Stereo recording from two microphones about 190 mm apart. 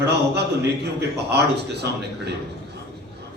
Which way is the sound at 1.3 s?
60° right (ahead or behind).